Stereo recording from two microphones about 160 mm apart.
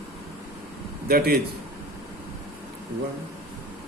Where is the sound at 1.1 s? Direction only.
70° right (ahead or behind).